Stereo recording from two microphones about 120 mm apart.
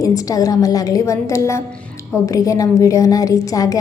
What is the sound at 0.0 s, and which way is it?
A woman's voice, 30° left (ahead or behind).